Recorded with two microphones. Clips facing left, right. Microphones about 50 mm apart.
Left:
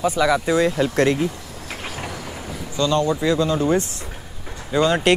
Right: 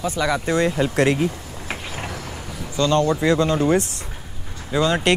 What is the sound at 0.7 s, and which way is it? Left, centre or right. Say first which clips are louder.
Speech: even; centre.